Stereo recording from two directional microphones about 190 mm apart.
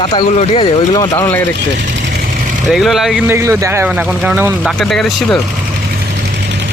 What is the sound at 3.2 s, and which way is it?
A man's voice, 15° right (ahead or behind).